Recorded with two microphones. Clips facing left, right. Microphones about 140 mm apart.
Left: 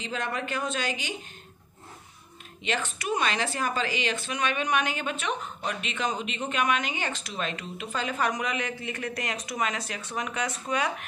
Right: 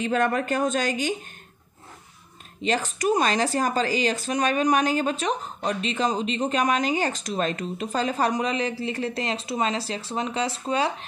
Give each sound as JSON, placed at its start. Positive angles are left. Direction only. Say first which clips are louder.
{"t": 0.0, "sound": "speech", "louder": "right 9 dB", "side_deg": -50}
{"t": 2.6, "sound": "speech", "louder": "right 7 dB", "side_deg": -40}